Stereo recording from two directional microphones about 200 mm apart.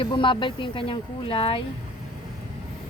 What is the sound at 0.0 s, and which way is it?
Speech, 25° left (ahead or behind).